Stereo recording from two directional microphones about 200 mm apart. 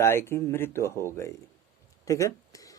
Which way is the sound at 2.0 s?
15° left (ahead or behind).